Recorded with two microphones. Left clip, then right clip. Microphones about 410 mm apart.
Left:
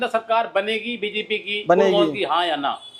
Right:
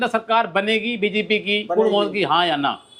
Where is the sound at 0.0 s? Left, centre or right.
Centre.